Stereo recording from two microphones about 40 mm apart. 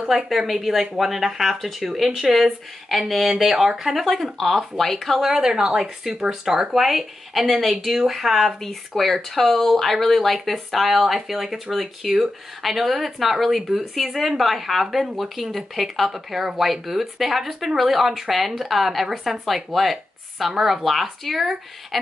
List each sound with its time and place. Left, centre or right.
0.5 s speech: centre
5.2 s a woman's voice: centre
6.7 s speech: centre
8.5 s a woman's voice: centre